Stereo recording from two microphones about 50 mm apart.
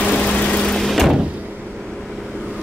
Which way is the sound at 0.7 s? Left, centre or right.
Centre.